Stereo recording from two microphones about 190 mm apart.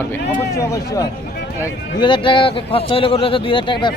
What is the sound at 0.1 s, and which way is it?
A man's voice, 15° left (ahead or behind).